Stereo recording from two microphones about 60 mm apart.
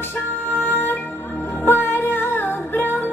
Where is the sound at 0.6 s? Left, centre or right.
Left.